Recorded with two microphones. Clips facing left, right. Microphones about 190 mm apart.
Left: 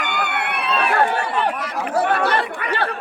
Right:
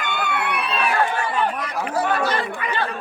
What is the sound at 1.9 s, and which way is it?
Speech, 65° left (ahead or behind).